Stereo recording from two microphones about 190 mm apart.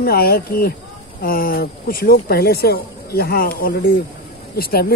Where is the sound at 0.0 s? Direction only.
55° left (ahead or behind).